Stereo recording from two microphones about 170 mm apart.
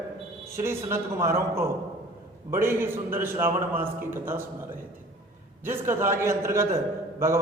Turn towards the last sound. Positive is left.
turn(degrees=-15)  # may be behind; listen again after turning